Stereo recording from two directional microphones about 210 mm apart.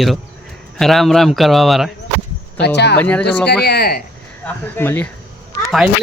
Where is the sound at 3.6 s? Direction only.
50° left (ahead or behind).